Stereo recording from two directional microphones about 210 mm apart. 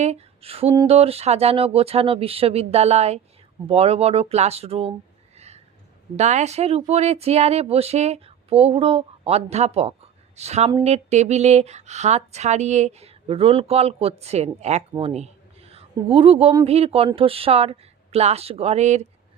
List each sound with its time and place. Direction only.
0.0 s speech: 30° right (ahead or behind)
5.4 s a sound: 30° right (ahead or behind)
6.1 s speech: 35° right (ahead or behind)